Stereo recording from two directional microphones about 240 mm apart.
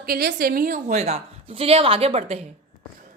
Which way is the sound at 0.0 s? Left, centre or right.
Right.